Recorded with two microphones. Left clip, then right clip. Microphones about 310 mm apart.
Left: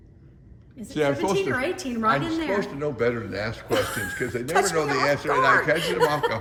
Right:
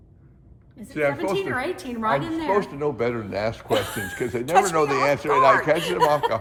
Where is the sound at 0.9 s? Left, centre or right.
Centre.